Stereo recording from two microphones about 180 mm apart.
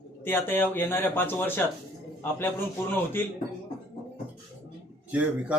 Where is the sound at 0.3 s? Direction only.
10° left (ahead or behind).